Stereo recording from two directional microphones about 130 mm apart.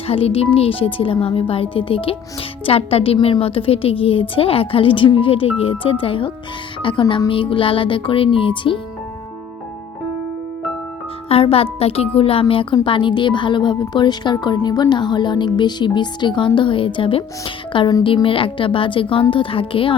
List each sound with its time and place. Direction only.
0.1 s a woman's voice: 50° left (ahead or behind)
11.3 s a woman's voice: 50° left (ahead or behind)